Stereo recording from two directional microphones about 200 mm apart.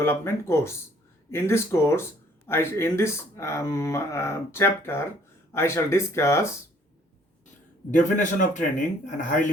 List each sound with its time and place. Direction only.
0.0 s speech: 15° left (ahead or behind)
7.9 s speech: 40° left (ahead or behind)